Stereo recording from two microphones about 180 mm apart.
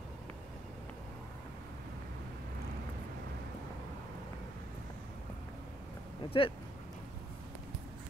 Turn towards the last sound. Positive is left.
turn(degrees=30)  # may be behind; listen again after turning